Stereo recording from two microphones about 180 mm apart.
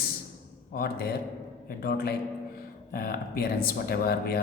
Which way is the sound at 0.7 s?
60° left (ahead or behind).